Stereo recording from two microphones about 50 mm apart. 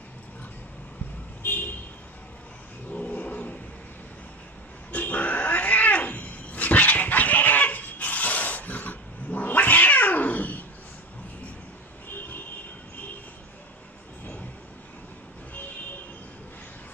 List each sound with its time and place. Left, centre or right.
1.4 s vehicle: left
2.9 s vehicle: left
4.9 s cat: left